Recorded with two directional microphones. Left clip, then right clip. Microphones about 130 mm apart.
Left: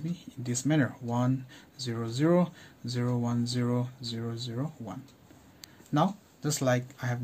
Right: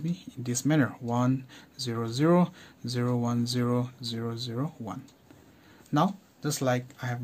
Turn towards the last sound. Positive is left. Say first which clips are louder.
# even
turn(degrees=-5)  # may be behind; listen again after turning